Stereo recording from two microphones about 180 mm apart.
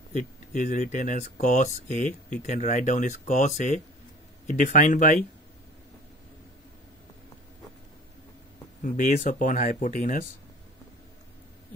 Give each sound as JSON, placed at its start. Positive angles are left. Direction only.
{"t": 0.1, "sound": "speech", "side_deg": 45}
{"t": 8.8, "sound": "speech", "side_deg": 45}